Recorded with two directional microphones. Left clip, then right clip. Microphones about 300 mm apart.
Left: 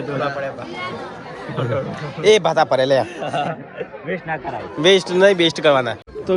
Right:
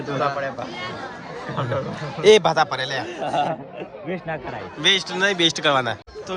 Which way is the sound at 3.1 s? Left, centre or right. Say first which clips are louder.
Even; centre.